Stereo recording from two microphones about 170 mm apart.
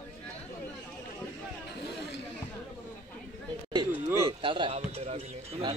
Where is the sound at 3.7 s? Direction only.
20° right (ahead or behind).